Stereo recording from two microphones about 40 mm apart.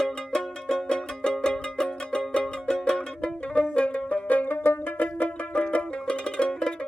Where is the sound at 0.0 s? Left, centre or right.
Centre; by 4.4 s left.